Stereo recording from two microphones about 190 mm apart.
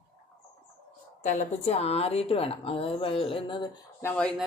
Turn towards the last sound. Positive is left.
turn(degrees=5)  # may be behind; listen again after turning